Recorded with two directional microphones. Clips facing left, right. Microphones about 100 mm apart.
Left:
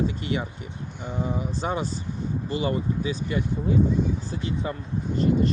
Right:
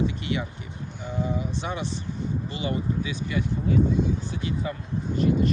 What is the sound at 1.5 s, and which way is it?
Speech, 35° left (ahead or behind).